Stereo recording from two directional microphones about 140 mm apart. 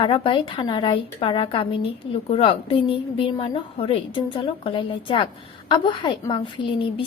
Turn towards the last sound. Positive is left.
turn(degrees=35)  # may be behind; listen again after turning